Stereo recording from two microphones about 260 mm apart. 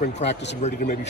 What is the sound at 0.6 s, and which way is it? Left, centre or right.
Speech, left.